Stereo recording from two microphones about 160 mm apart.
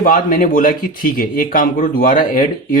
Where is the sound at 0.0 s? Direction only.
60° left (ahead or behind).